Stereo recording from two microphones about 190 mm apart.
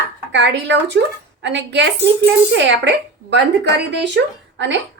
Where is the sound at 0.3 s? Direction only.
70° right (ahead or behind).